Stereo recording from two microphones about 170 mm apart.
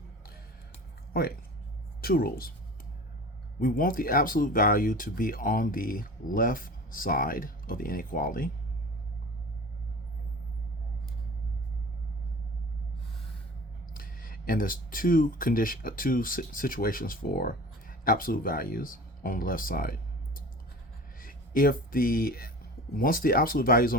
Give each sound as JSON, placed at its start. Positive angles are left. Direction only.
{"t": 1.1, "sound": "a woman's voice", "side_deg": 60}
{"t": 3.6, "sound": "speech", "side_deg": 55}
{"t": 13.9, "sound": "speech", "side_deg": 55}